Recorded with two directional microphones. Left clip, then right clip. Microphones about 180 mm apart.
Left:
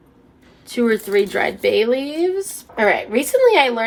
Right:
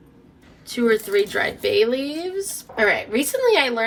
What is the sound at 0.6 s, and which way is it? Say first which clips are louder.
Speech: left 1 dB; 55° left (ahead or behind).